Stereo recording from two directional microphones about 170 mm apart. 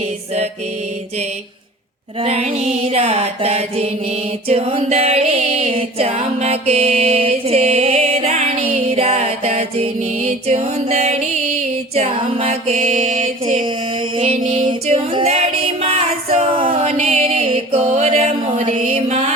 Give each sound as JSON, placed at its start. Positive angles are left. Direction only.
{"t": 2.2, "sound": "music", "side_deg": -35}
{"t": 11.9, "sound": "mantra", "side_deg": -30}
{"t": 14.2, "sound": "music", "side_deg": -35}